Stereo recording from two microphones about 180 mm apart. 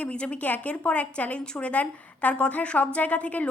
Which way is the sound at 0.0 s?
5° left (ahead or behind).